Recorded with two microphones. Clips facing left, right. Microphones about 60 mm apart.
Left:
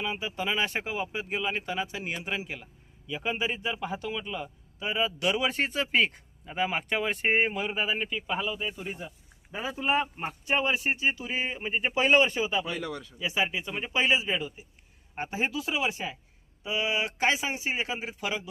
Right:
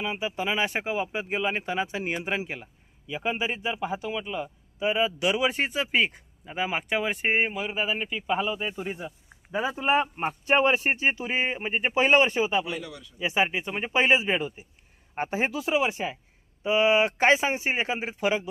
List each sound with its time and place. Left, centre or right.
0.0 s speech: centre
12.8 s speech: left
13.1 s speech: right